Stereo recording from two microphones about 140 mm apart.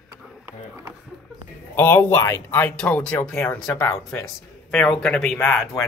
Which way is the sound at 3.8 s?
25° left (ahead or behind).